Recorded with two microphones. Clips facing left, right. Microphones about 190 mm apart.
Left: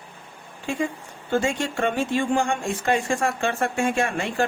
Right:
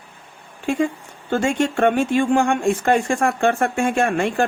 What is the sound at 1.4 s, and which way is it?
Speech, 60° right (ahead or behind).